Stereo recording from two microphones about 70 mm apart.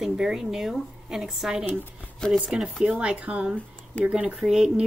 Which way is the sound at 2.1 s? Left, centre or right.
Centre.